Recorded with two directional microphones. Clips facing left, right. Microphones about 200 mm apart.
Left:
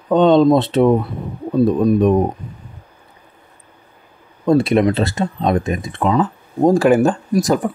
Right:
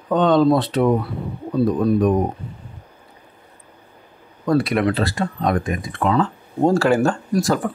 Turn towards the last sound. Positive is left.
turn(degrees=20)  # may be behind; listen again after turning